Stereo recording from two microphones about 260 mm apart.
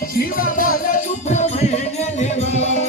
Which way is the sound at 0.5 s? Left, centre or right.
Left.